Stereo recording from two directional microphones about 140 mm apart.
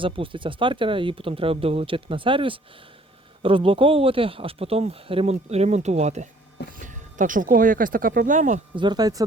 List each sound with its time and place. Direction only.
0.0 s speech: 40° right (ahead or behind); by 6.2 s 55° right (ahead or behind)
6.7 s speech: 70° right (ahead or behind)
8.7 s speech: 30° right (ahead or behind)